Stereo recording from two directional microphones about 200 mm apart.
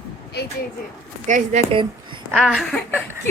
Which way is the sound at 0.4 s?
55° left (ahead or behind).